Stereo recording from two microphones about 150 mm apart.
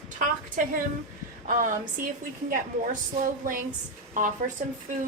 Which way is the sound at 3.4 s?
60° right (ahead or behind).